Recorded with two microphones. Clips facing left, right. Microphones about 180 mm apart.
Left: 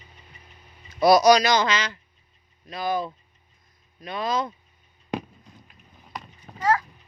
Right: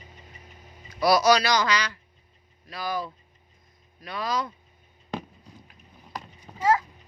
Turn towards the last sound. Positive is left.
turn(degrees=-5)  # may be behind; listen again after turning